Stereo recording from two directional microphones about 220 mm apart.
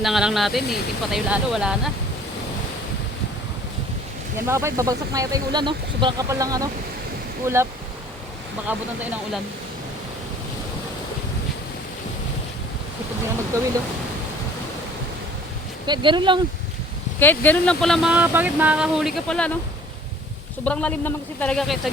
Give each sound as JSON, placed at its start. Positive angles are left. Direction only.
{"t": 0.0, "sound": "speech", "side_deg": 0}
{"t": 4.4, "sound": "speech", "side_deg": -15}
{"t": 15.9, "sound": "speech", "side_deg": -20}
{"t": 17.2, "sound": "speech", "side_deg": 10}
{"t": 20.7, "sound": "speech", "side_deg": 5}